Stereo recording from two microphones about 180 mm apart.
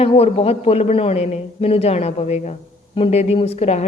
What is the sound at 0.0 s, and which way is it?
A man's voice, 35° left (ahead or behind).